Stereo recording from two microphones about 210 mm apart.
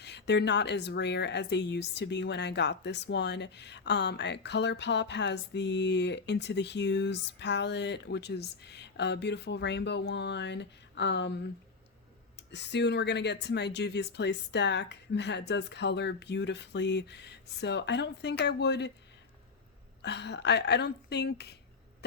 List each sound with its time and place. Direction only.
0.0 s speech: 55° left (ahead or behind)
12.5 s speech: 55° left (ahead or behind)
20.0 s speech: 55° left (ahead or behind)